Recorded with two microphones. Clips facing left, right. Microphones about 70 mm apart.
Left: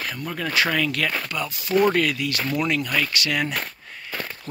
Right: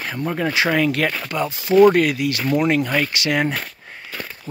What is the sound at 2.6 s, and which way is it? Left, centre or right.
Speech, right.